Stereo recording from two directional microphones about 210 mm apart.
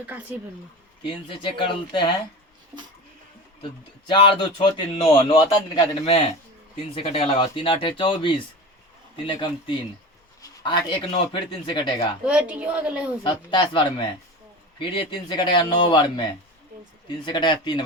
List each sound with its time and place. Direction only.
0.0 s speech: 5° right (ahead or behind)
1.0 s speech: 25° left (ahead or behind)
3.6 s speech: 20° left (ahead or behind)
12.2 s a woman's voice: 5° right (ahead or behind)
13.2 s speech: 20° left (ahead or behind)
17.2 s speech: 20° left (ahead or behind)